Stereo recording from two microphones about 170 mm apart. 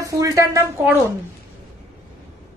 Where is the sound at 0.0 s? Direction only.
20° right (ahead or behind).